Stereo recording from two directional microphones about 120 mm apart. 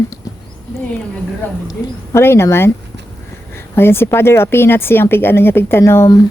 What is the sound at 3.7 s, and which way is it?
Speech, 20° left (ahead or behind).